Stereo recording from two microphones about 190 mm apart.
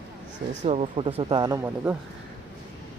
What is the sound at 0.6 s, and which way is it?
Speech, 35° right (ahead or behind).